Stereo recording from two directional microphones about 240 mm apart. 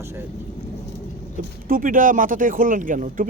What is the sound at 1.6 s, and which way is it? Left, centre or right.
Speech, right.